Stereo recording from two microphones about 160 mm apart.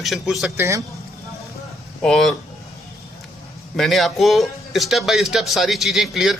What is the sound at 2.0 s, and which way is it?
Speech, 5° left (ahead or behind).